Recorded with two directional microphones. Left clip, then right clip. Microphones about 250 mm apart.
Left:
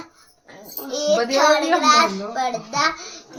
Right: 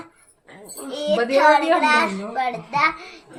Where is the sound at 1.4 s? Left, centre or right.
Centre.